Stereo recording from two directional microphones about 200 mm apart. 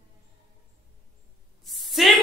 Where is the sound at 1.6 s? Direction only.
Centre (ahead or behind).